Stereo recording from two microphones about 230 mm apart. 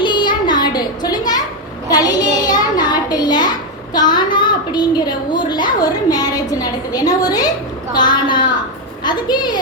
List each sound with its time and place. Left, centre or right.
0.0 s music: centre
1.9 s a woman's voice: centre